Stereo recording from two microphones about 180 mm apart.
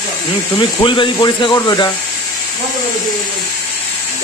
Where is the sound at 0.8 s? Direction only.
25° left (ahead or behind).